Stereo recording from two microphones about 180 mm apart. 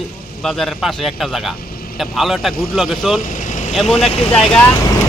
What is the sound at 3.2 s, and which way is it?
Vehicle, 45° left (ahead or behind).